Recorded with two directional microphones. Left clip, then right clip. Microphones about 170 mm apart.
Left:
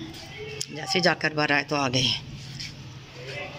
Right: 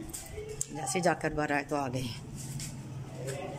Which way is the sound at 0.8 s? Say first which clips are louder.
Left 6 dB; 15° right (ahead or behind).